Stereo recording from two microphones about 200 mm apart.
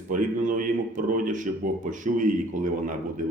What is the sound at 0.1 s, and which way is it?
A man's voice, 40° right (ahead or behind).